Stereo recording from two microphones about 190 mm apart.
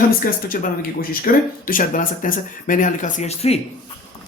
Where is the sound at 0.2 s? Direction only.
50° left (ahead or behind); by 3.6 s 35° left (ahead or behind).